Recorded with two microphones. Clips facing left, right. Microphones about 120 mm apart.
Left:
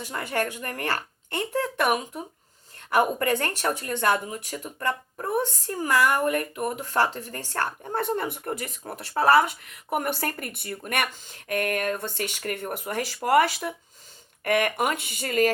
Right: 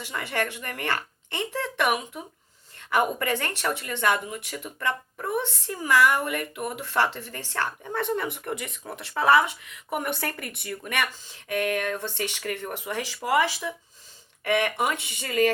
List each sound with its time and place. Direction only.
0.0 s speech: 40° left (ahead or behind)